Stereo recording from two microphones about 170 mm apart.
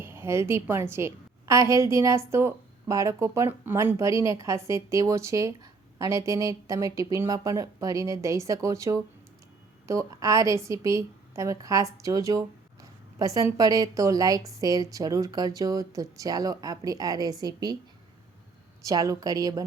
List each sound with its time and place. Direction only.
0.0 s a woman's voice: 15° right (ahead or behind)
18.9 s speech: 20° right (ahead or behind)